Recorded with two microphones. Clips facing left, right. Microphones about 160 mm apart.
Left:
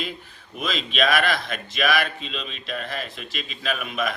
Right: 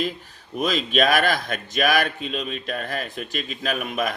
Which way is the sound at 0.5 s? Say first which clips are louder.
Right 6 dB; 45° right (ahead or behind).